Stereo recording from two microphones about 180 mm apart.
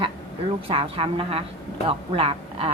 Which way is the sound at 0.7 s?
35° right (ahead or behind).